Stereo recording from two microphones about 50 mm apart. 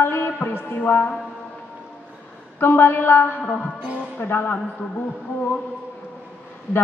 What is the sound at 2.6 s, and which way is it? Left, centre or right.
Speech, left.